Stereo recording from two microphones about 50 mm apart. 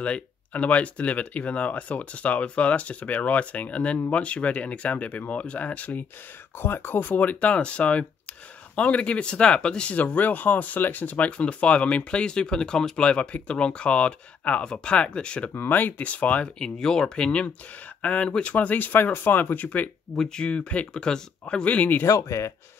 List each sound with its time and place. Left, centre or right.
0.0 s speech: left
6.6 s speech: left; by 9.9 s centre
9.9 s speech: left
11.2 s speech: left
15.5 s speech: left
16.5 s speech: centre; by 19.9 s left
20.2 s speech: centre
22.0 s speech: left